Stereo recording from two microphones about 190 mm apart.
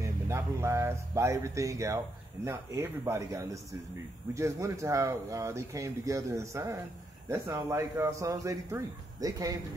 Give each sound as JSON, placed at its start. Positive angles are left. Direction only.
{"t": 0.0, "sound": "speech", "side_deg": -15}